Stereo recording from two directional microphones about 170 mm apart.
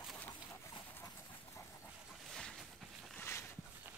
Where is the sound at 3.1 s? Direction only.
10° left (ahead or behind).